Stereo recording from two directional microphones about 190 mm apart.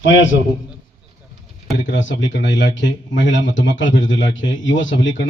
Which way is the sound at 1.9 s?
75° left (ahead or behind).